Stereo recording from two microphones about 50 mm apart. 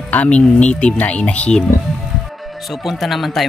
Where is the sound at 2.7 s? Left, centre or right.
Centre.